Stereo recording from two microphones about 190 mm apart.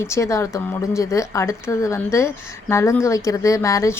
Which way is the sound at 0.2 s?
15° left (ahead or behind).